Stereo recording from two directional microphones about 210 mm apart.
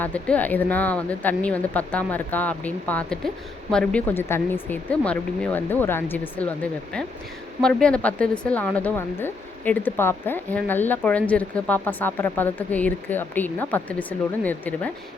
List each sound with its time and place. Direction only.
0.0 s speech: 5° left (ahead or behind)